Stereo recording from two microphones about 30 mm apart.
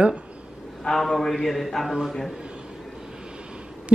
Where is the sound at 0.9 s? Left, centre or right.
Left.